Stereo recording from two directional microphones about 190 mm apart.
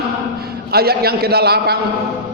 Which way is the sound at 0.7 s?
55° right (ahead or behind).